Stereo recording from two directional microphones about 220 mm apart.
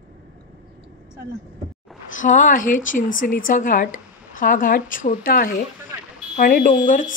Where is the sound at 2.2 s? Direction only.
35° left (ahead or behind).